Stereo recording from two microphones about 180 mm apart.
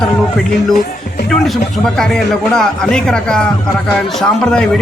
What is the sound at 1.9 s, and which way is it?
Music, 5° left (ahead or behind).